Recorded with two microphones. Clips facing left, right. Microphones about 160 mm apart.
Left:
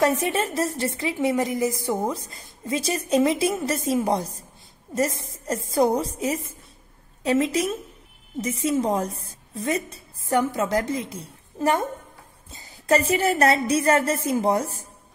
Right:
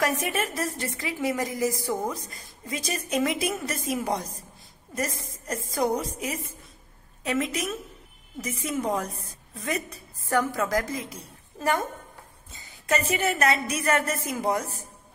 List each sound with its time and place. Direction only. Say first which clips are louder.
0.0 s a woman's voice: left 5 dB; 25° left (ahead or behind)